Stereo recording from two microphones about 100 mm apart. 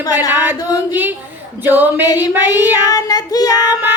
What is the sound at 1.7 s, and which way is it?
Female singing, 20° right (ahead or behind).